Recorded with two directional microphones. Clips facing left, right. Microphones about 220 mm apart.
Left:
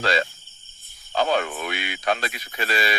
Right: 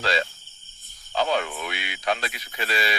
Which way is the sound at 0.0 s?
50° left (ahead or behind).